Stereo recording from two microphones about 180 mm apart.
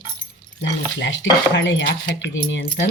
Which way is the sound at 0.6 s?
85° left.